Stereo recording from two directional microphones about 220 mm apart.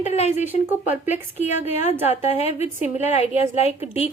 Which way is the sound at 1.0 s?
35° left (ahead or behind).